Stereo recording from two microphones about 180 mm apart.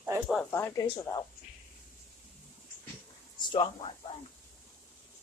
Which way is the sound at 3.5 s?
30° left (ahead or behind).